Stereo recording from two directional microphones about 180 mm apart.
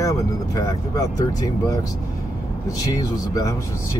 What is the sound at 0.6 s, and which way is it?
Speech, 20° left (ahead or behind).